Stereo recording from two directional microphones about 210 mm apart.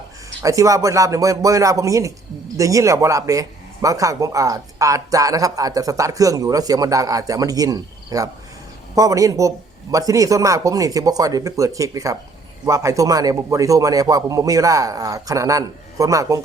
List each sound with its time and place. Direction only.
0.4 s a man's voice: 15° right (ahead or behind)